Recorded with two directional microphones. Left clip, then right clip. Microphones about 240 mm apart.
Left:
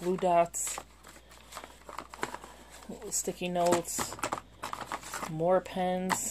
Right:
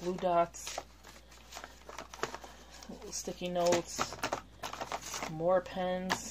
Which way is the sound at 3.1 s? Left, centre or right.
Left.